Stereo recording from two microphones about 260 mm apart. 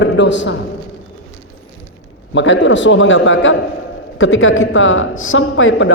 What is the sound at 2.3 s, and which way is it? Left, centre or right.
A woman's voice, left.